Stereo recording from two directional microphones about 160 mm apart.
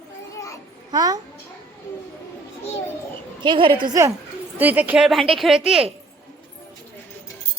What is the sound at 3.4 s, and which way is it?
Speech, 30° right (ahead or behind).